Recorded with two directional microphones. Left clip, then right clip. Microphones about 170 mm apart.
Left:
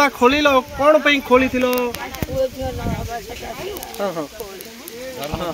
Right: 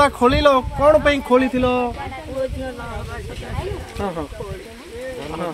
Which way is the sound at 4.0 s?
25° right (ahead or behind).